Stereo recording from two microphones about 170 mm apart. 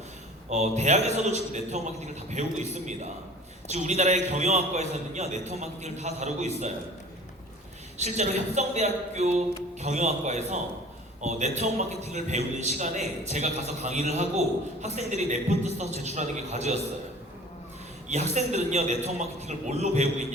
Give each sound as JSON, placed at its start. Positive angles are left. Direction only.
{"t": 0.5, "sound": "a man's voice", "side_deg": -45}
{"t": 7.9, "sound": "a man's voice", "side_deg": -40}
{"t": 18.1, "sound": "a man's voice", "side_deg": -40}